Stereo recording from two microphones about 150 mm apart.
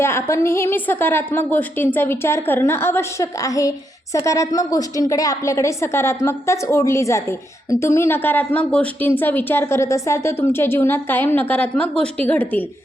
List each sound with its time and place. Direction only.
0.0 s a woman's voice: 15° left (ahead or behind)